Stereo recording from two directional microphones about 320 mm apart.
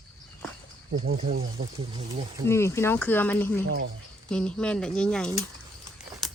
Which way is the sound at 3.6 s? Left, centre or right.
Right.